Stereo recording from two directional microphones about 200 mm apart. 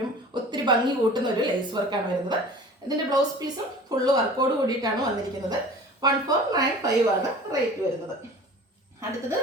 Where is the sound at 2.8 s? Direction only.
20° right (ahead or behind).